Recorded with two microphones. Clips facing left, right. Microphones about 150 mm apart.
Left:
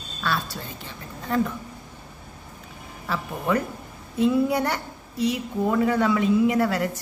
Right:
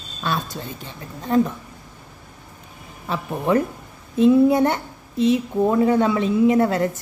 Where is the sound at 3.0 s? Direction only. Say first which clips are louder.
Right 4 dB; 25° right (ahead or behind).